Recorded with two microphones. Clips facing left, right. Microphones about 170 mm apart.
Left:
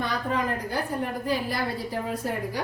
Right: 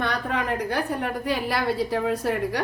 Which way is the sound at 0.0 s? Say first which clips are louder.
Right 1 dB; 70° right (ahead or behind).